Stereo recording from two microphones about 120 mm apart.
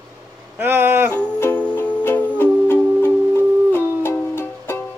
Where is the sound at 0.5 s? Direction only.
20° right (ahead or behind).